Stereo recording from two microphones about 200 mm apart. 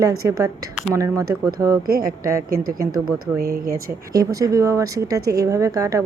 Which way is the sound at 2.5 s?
50° right (ahead or behind).